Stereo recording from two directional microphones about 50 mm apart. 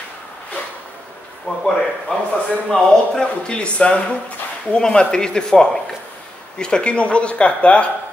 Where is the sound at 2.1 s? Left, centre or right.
Left.